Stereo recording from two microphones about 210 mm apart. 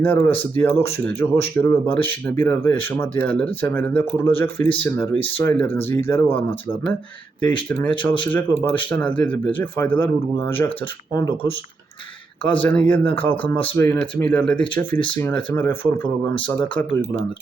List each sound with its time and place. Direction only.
0.0 s speech: 10° left (ahead or behind)
8.2 s speech: 10° left (ahead or behind)
12.6 s speech: 10° left (ahead or behind)
16.7 s speech: 20° left (ahead or behind)